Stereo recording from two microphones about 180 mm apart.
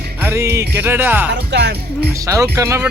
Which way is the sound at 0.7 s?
10° right (ahead or behind).